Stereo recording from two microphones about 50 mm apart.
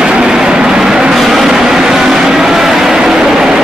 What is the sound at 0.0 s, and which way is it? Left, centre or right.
Train, centre.